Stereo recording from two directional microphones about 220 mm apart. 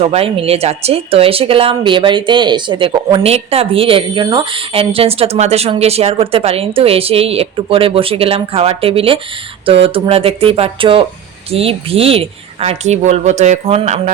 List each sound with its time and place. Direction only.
0.0 s speech: 25° right (ahead or behind)